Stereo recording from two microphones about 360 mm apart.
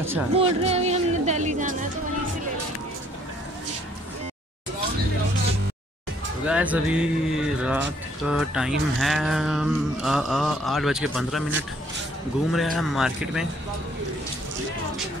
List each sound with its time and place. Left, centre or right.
0.0 s speech: centre
0.6 s speech: centre
6.4 s speech: centre
12.5 s speech: centre